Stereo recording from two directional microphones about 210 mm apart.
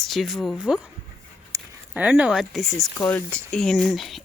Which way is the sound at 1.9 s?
5° right (ahead or behind).